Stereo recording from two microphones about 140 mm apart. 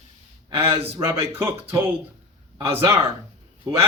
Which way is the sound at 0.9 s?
20° right (ahead or behind).